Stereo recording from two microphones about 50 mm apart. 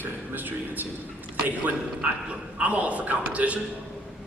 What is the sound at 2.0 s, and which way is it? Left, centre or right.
A man's voice, right.